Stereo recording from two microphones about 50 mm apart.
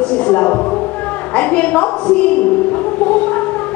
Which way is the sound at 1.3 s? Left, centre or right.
Left.